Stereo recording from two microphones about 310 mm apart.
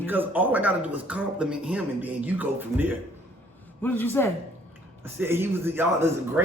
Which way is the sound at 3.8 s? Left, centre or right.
Centre.